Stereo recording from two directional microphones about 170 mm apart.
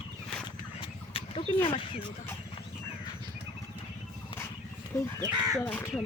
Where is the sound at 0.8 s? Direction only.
30° left (ahead or behind).